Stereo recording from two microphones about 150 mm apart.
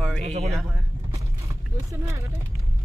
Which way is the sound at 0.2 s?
45° right (ahead or behind).